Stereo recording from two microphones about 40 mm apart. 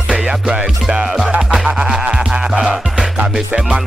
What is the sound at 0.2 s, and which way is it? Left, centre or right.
Music, right.